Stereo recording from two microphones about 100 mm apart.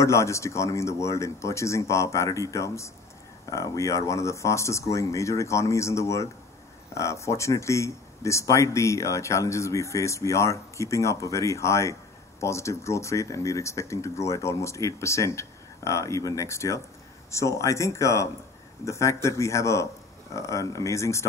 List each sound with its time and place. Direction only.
0.0 s speech: 30° left (ahead or behind)